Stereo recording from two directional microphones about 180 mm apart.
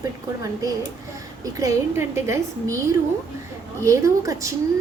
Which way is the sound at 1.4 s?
20° right (ahead or behind).